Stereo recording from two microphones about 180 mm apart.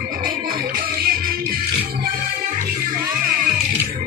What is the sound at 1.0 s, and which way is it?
Music, 55° right (ahead or behind).